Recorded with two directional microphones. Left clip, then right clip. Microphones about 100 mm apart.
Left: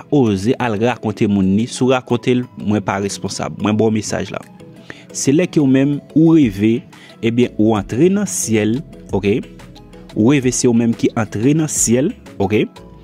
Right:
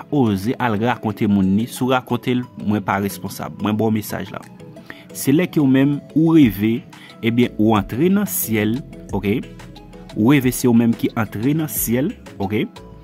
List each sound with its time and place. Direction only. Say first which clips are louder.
0.1 s speech: left 5 dB; 25° left (ahead or behind)
1.3 s speech: left 2 dB; 5° left (ahead or behind)
1.6 s speech: left 3 dB; 25° left (ahead or behind); by 12.6 s 45° left (ahead or behind)